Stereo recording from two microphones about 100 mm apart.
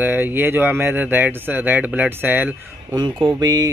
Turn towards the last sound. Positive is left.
turn(degrees=-40)  # may be behind; listen again after turning